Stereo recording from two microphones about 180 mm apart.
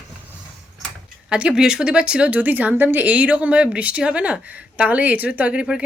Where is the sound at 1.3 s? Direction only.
5° right (ahead or behind).